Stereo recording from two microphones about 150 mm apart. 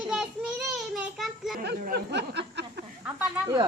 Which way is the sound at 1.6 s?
90° right.